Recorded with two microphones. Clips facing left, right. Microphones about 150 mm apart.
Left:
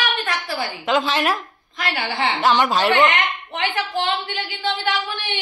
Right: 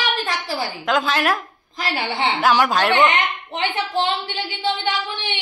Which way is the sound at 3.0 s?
30° right (ahead or behind).